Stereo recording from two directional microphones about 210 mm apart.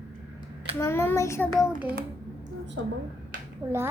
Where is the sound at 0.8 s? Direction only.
10° left (ahead or behind).